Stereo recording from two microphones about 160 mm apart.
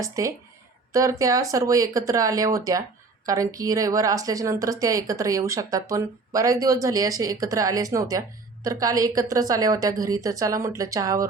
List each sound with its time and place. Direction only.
0.0 s a woman's voice: 20° right (ahead or behind)